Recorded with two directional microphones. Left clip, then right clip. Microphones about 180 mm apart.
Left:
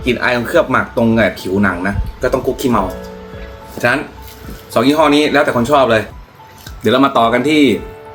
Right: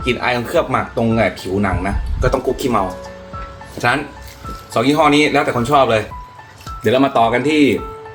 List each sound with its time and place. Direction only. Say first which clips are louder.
0.0 s speech: left 3 dB; 15° left (ahead or behind)
4.7 s speech: left 2 dB; 15° left (ahead or behind)